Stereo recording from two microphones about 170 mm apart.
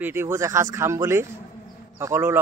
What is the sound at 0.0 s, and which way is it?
A man's voice, 15° right (ahead or behind).